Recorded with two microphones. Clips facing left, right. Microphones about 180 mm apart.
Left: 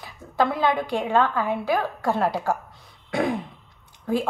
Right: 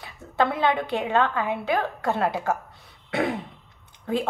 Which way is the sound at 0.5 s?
20° right (ahead or behind).